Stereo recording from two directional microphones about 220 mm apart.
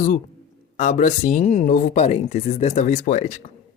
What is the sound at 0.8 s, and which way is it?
Speech, 35° left (ahead or behind).